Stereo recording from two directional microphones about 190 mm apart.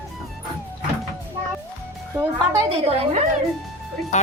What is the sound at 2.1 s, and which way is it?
Speech, 15° right (ahead or behind).